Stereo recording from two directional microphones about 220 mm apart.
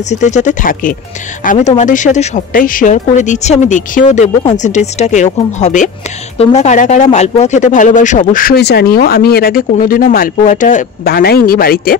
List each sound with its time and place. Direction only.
0.1 s speech: 35° left (ahead or behind)